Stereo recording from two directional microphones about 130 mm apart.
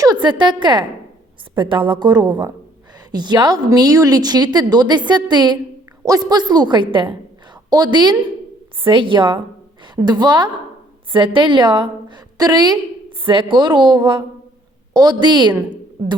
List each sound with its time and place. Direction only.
0.0 s a woman's voice: 35° right (ahead or behind)